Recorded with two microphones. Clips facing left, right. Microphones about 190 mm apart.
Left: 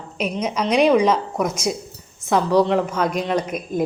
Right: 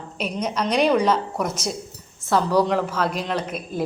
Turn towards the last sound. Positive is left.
turn(degrees=-5)  # may be behind; listen again after turning